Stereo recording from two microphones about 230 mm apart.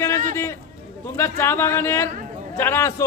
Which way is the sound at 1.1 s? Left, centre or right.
Centre.